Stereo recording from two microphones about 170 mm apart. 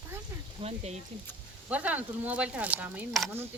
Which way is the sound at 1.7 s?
10° right (ahead or behind).